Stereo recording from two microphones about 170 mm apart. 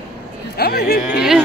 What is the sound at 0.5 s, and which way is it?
Speech, 65° left (ahead or behind).